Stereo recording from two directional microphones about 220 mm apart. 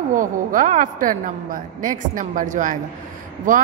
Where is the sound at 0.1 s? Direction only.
35° right (ahead or behind).